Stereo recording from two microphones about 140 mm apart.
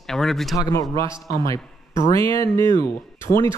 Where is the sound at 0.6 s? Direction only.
25° left (ahead or behind).